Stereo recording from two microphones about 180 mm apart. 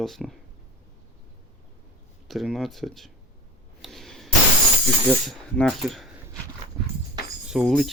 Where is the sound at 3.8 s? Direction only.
Centre (ahead or behind).